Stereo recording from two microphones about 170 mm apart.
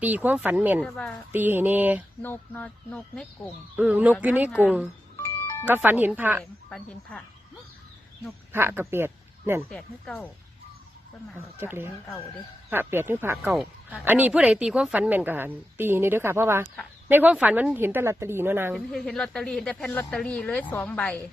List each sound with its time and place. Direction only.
0.0 s a woman's voice: 10° right (ahead or behind)
0.9 s speech: 5° left (ahead or behind)
1.3 s a woman's voice: 10° right (ahead or behind)
2.2 s speech: 10° left (ahead or behind)
3.8 s a woman's voice: 10° right (ahead or behind)
5.2 s music: 15° left (ahead or behind)
5.6 s a woman's voice: 10° right (ahead or behind)
6.4 s speech: 5° left (ahead or behind)
8.5 s speech: 15° right (ahead or behind)
9.7 s speech: 5° left (ahead or behind)
11.3 s a woman's voice: 15° right (ahead or behind)
13.5 s a woman's voice: centre (ahead or behind)
18.7 s speech: centre (ahead or behind)